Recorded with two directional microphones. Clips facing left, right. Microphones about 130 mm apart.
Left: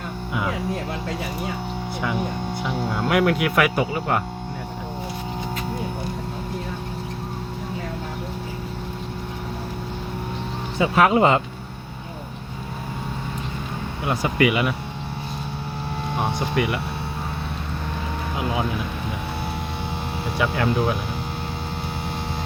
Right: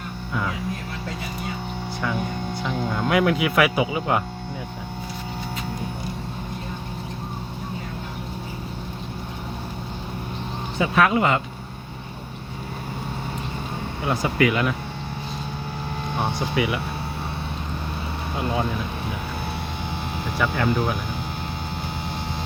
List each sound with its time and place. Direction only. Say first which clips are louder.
2.6 s speech: even; 5° left (ahead or behind)
10.9 s speech: left 3 dB; 25° left (ahead or behind)
14.0 s speech: left 1 dB; 5° left (ahead or behind)
16.1 s speech: left 1 dB; centre (ahead or behind)
20.4 s speech: left 1 dB; 5° left (ahead or behind)